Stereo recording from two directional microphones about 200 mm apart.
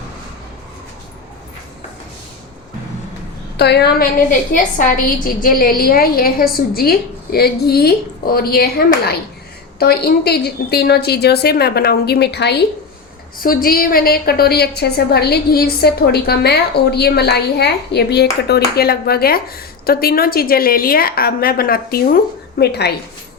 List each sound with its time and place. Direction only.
3.6 s a woman's voice: 55° left (ahead or behind)